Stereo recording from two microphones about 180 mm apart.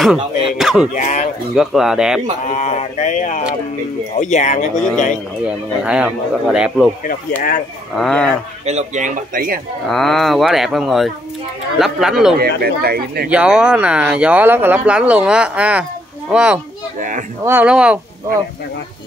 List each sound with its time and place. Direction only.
0.6 s speech: 5° right (ahead or behind)
0.9 s speech: 40° left (ahead or behind)
1.5 s speech: centre (ahead or behind)
2.4 s speech: 40° left (ahead or behind)
5.4 s speech: 5° right (ahead or behind)
8.0 s speech: 5° left (ahead or behind)
8.6 s speech: 40° right (ahead or behind)
9.8 s speech: centre (ahead or behind)
12.4 s speech: 60° right (ahead or behind)
13.3 s speech: 5° right (ahead or behind)